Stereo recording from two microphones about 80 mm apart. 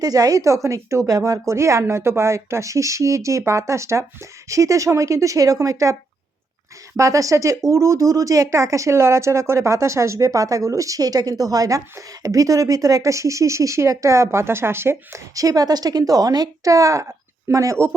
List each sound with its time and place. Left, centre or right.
0.0 s speech: right
15.4 s a woman's voice: right